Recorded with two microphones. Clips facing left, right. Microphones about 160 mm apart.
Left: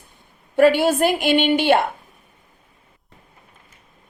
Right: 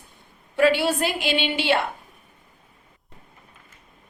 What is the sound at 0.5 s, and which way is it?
A woman's voice, 50° left (ahead or behind).